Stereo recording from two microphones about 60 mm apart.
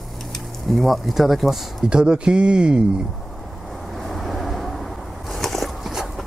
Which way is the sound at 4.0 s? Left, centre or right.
Centre.